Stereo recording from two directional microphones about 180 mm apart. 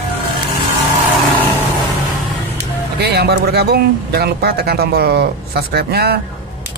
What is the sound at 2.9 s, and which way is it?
Speech, 65° right (ahead or behind).